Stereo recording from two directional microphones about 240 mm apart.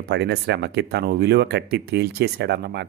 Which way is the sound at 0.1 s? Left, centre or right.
Right.